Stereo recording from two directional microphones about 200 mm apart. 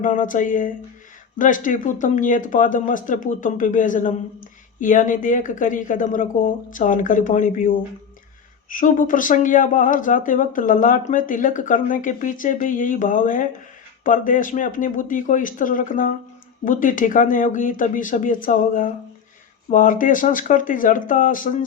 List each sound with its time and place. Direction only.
0.0 s speech: 40° left (ahead or behind)